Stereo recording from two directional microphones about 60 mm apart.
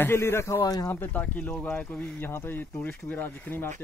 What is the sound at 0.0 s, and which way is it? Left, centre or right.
Speech, left.